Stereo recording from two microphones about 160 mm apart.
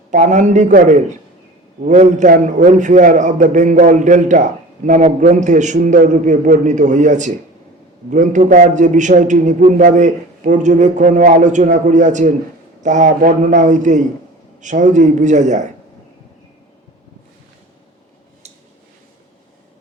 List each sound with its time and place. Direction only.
0.1 s a man's voice: 50° right (ahead or behind)